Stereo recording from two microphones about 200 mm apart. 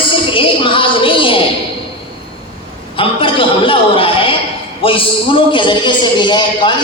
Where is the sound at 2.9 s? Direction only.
25° left (ahead or behind).